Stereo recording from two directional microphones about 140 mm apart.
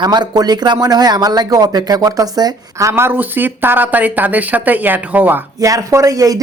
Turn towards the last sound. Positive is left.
turn(degrees=-25)  # may be behind; listen again after turning